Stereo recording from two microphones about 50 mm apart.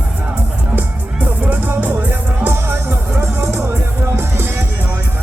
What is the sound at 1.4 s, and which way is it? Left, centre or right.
Music, right.